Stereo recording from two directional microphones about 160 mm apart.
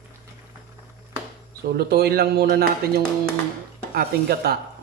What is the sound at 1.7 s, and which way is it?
Speech, 80° right.